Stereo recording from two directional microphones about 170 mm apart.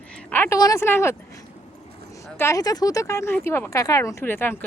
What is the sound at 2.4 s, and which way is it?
Speech, 20° left (ahead or behind).